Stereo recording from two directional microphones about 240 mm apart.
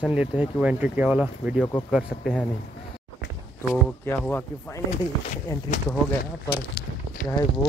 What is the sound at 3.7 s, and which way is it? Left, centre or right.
Speech, centre.